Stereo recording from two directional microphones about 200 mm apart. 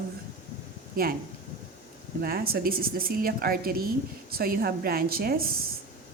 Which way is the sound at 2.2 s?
50° right (ahead or behind).